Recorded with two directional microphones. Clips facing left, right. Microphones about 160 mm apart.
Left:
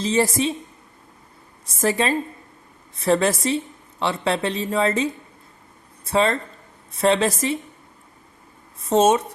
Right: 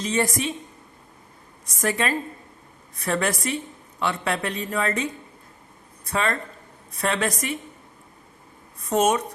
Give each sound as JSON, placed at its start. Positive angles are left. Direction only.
{"t": 0.0, "sound": "speech", "side_deg": 30}
{"t": 1.6, "sound": "speech", "side_deg": 30}
{"t": 6.1, "sound": "speech", "side_deg": 30}
{"t": 8.8, "sound": "speech", "side_deg": 25}